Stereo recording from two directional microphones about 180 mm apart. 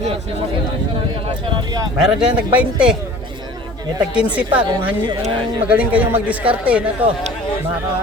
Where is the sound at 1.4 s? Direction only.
25° right (ahead or behind).